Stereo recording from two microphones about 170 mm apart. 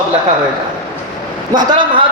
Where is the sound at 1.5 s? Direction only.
25° right (ahead or behind).